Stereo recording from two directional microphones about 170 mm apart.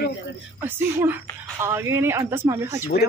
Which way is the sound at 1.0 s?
15° right (ahead or behind).